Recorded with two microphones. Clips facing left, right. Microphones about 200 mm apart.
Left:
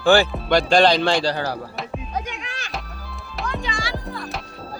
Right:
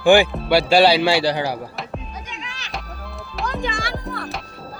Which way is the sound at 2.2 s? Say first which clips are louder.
Left 6 dB; 55° left (ahead or behind).